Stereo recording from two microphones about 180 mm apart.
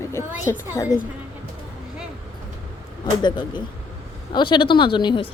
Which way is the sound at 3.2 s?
25° left (ahead or behind).